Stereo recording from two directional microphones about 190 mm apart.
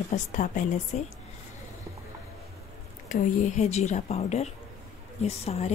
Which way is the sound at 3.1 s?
35° left (ahead or behind).